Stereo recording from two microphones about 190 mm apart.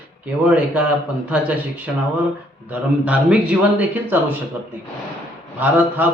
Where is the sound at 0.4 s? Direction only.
5° right (ahead or behind).